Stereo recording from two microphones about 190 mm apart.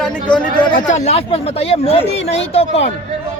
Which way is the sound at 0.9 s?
35° left (ahead or behind).